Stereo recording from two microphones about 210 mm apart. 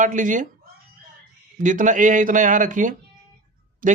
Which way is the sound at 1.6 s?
35° right (ahead or behind).